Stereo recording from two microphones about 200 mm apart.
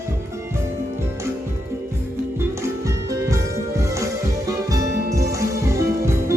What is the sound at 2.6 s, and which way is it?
Music, 15° right (ahead or behind).